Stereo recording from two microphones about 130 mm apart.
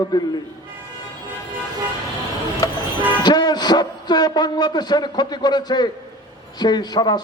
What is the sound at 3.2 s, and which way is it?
A man's voice, 30° left (ahead or behind).